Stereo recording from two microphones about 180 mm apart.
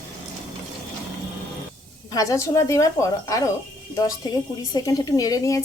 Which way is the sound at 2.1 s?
20° left (ahead or behind).